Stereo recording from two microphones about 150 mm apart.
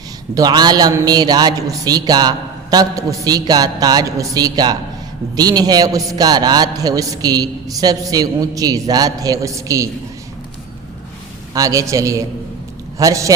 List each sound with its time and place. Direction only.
0.3 s a man's voice: 25° right (ahead or behind)
11.5 s a man's voice: 20° right (ahead or behind)